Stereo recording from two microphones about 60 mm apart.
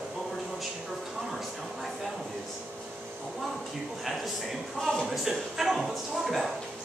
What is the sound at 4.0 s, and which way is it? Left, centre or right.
Speech, centre.